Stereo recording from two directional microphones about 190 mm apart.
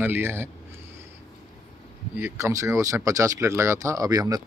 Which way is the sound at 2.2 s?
10° right (ahead or behind).